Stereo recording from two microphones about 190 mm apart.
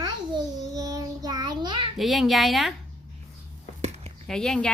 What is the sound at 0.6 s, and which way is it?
Child singing, 20° right (ahead or behind).